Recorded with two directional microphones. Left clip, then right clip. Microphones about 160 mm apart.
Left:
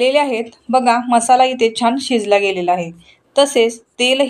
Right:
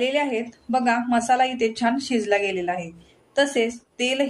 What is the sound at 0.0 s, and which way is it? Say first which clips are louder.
A woman's voice: left 8 dB; 35° left (ahead or behind).